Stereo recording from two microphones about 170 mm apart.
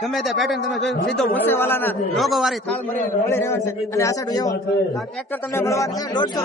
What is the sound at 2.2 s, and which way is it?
Speech, centre (ahead or behind).